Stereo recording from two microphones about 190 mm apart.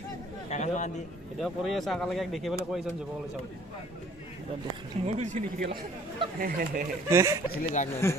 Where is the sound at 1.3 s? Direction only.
Centre (ahead or behind).